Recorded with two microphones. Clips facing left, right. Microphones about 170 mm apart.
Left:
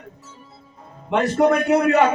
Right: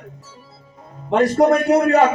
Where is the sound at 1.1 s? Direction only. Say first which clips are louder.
Right 3 dB; 35° right (ahead or behind).